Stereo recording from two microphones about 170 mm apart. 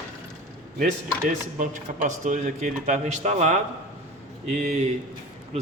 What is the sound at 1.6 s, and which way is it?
A man's voice, 45° right (ahead or behind).